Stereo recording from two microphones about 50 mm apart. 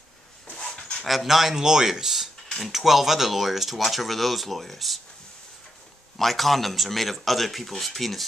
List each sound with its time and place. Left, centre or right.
0.7 s dog: left
1.0 s speech: centre
6.1 s speech: centre